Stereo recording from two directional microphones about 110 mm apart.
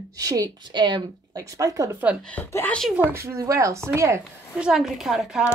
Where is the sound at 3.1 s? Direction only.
25° right (ahead or behind).